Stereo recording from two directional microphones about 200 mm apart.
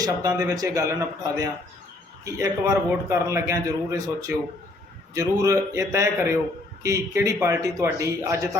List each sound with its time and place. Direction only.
0.0 s a man's voice: 15° right (ahead or behind)